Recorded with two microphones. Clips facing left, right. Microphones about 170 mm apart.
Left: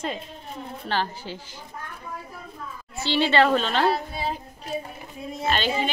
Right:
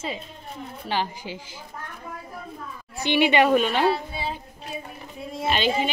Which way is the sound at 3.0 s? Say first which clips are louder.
Right 1 dB; 15° right (ahead or behind).